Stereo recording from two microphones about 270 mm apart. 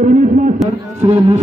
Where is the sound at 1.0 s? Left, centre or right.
Right.